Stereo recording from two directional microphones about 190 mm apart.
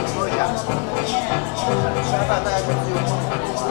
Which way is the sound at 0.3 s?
15° left (ahead or behind).